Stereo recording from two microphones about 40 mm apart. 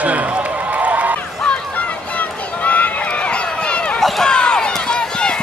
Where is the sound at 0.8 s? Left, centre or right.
Right.